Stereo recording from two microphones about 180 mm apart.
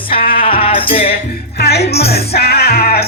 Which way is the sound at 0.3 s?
50° left (ahead or behind).